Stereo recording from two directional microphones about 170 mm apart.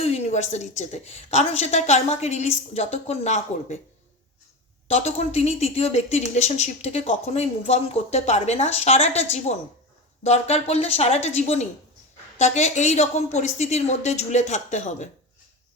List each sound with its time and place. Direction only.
0.0 s a woman's voice: 40° left (ahead or behind)
4.9 s a woman's voice: 40° left (ahead or behind)